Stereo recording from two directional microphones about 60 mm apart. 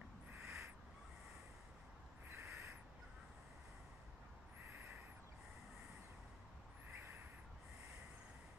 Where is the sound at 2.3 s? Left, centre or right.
Right.